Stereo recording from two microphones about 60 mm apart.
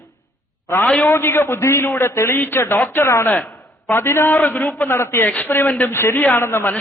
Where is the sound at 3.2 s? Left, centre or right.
Left.